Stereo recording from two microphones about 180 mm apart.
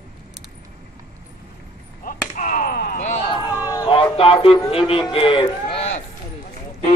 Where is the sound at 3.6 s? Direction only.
25° left (ahead or behind).